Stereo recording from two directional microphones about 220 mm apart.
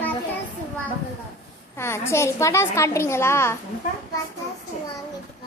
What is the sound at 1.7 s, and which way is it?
A child's voice, 10° left (ahead or behind).